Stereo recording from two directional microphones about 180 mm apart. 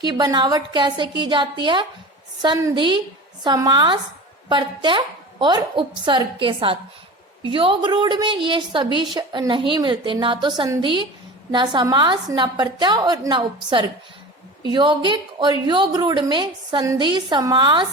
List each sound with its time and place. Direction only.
0.0 s a woman's voice: 25° right (ahead or behind)